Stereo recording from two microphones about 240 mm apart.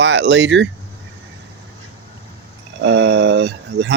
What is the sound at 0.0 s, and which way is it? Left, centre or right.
Speech, right.